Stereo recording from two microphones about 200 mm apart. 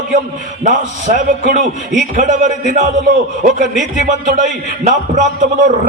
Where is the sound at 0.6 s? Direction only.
40° right (ahead or behind).